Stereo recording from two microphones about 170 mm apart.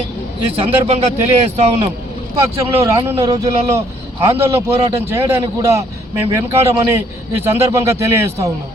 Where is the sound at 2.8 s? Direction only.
20° right (ahead or behind).